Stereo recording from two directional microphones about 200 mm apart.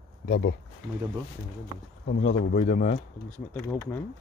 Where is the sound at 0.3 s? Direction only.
55° left (ahead or behind).